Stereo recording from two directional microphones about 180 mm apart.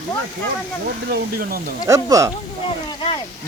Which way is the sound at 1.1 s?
55° right (ahead or behind).